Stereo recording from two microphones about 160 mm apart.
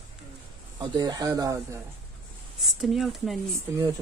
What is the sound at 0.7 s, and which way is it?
Speech, 25° right (ahead or behind).